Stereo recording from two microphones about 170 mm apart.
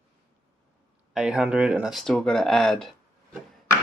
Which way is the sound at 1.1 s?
5° right (ahead or behind).